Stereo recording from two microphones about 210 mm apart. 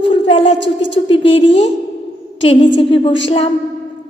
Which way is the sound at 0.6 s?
60° left (ahead or behind).